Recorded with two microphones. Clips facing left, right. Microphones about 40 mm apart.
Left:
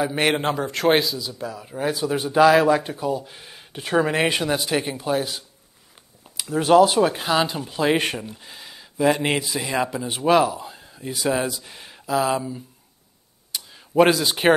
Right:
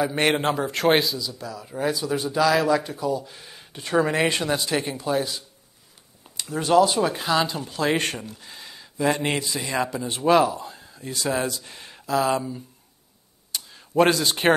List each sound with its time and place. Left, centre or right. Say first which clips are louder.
0.0 s a man's voice: even; centre
1.2 s speech: left 2 dB; left
1.7 s speech: even; centre
2.0 s speech: left 8 dB; left
3.3 s speech: left 3 dB; centre
6.6 s speech: left 3 dB; centre
13.5 s a sound: left 1 dB; centre